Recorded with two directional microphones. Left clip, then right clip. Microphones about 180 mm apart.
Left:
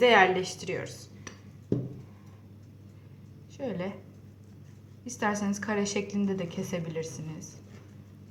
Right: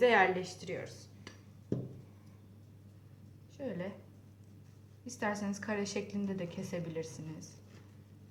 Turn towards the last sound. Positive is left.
turn(degrees=10)  # may be behind; listen again after turning